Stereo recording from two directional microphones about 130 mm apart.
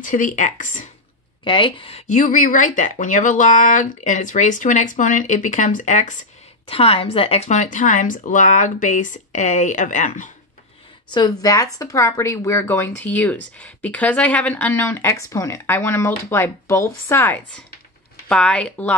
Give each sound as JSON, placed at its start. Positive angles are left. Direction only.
{"t": 0.0, "sound": "speech", "side_deg": 90}
{"t": 1.4, "sound": "speech", "side_deg": 40}
{"t": 2.0, "sound": "speech", "side_deg": 75}
{"t": 6.7, "sound": "speech", "side_deg": 45}
{"t": 11.1, "sound": "a woman's voice", "side_deg": 35}